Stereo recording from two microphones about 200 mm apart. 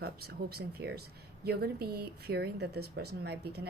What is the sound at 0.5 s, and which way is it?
A woman's voice, 55° right (ahead or behind).